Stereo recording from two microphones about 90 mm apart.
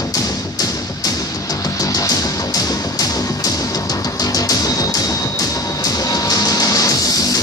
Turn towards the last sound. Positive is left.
turn(degrees=40)  # may be behind; listen again after turning